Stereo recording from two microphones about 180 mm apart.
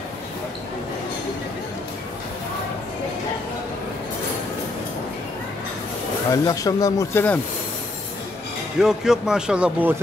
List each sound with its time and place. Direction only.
6.3 s speech: 20° left (ahead or behind)
8.7 s speech: 5° right (ahead or behind)